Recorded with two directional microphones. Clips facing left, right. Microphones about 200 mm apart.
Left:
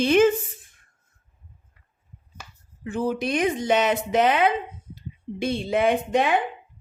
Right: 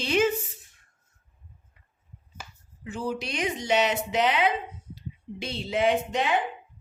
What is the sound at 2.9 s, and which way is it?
A woman's voice, 55° left (ahead or behind).